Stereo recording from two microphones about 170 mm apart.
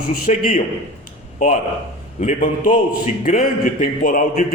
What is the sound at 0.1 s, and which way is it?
Speech, 50° left (ahead or behind).